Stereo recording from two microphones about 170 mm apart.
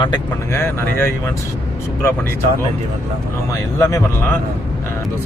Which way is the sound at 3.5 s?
20° left (ahead or behind).